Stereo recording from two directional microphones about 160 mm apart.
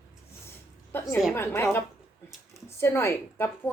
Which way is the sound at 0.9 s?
15° left (ahead or behind).